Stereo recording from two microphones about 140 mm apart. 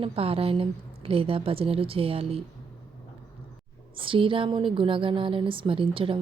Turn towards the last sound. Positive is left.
turn(degrees=-40)  # may be behind; listen again after turning